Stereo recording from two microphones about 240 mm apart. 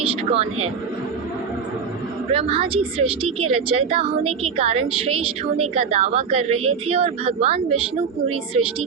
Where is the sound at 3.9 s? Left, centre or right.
Right.